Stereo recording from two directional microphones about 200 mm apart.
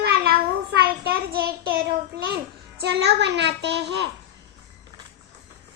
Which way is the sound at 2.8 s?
55° right (ahead or behind).